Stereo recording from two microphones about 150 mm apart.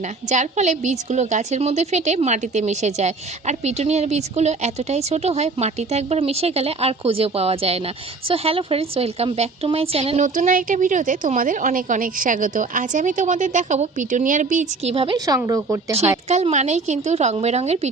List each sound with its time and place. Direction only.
0.3 s a woman's voice: 50° right (ahead or behind)
10.2 s a woman's voice: 60° right (ahead or behind)
14.9 s a woman's voice: 35° right (ahead or behind)
15.4 s speech: 20° right (ahead or behind)
16.3 s a woman's voice: 50° right (ahead or behind)